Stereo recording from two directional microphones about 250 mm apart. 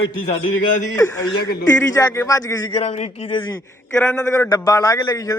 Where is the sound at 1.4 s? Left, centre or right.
Left.